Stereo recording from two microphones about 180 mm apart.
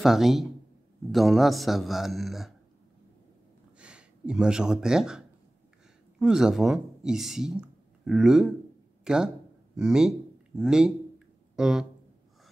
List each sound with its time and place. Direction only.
0.0 s a man's voice: centre (ahead or behind)
3.7 s speech: 5° right (ahead or behind)
9.8 s a sound: 5° right (ahead or behind)